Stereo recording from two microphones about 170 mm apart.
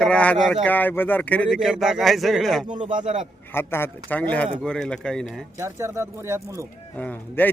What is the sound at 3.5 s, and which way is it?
Speech, 15° left (ahead or behind).